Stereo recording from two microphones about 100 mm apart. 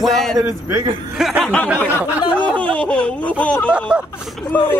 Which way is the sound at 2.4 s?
15° left (ahead or behind).